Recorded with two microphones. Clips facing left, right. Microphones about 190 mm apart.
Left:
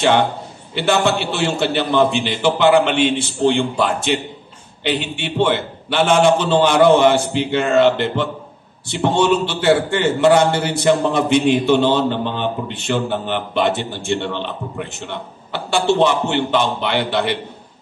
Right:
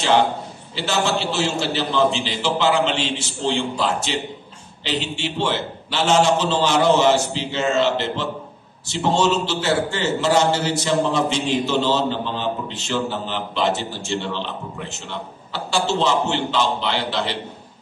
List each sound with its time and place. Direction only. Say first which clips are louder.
0.0 s a man's voice: left 2 dB; 60° left (ahead or behind)